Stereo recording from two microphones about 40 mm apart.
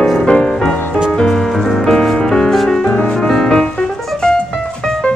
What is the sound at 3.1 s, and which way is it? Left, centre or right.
Music, centre.